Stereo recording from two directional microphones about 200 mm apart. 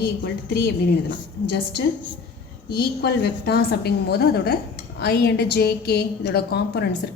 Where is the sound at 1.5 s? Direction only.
50° left (ahead or behind).